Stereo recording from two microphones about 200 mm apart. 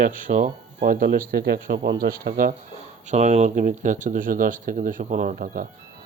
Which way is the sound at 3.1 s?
35° right (ahead or behind).